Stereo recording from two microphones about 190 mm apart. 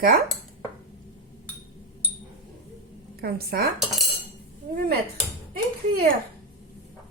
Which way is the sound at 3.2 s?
55° right (ahead or behind).